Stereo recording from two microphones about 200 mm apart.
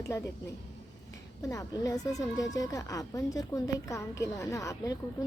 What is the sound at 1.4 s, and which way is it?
Speech, 15° left (ahead or behind).